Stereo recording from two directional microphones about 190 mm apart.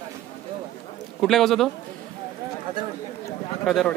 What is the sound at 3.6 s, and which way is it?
Speech, centre (ahead or behind).